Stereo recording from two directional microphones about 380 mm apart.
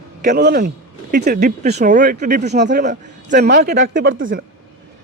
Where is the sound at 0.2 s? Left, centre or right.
Right.